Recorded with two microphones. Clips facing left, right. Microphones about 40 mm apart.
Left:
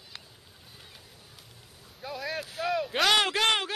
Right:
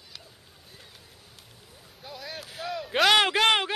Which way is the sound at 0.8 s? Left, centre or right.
Centre.